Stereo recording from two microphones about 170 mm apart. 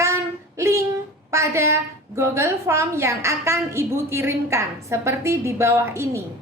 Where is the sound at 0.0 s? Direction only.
15° right (ahead or behind).